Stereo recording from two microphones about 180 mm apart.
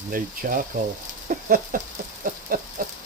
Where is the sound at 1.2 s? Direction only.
50° right (ahead or behind).